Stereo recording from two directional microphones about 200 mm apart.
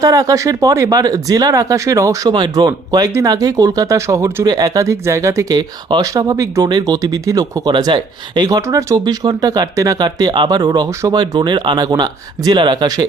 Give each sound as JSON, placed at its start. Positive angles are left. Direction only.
{"t": 0.0, "sound": "speech", "side_deg": -15}